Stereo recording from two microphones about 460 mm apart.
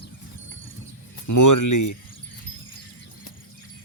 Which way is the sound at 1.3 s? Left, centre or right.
Left.